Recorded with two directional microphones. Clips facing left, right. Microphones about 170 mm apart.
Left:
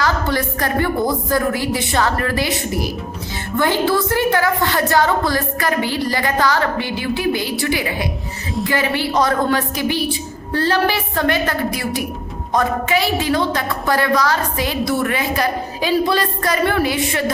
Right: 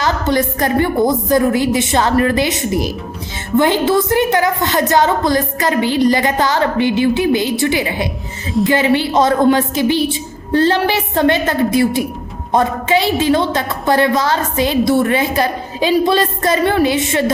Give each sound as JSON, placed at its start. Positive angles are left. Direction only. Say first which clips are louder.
{"t": 0.0, "sound": "a woman's voice", "louder": "right 3 dB", "side_deg": -20}